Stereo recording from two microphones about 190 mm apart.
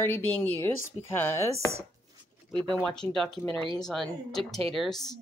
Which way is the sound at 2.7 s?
5° left (ahead or behind).